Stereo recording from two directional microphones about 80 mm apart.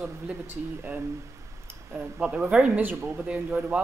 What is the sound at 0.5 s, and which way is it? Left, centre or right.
Speech, right.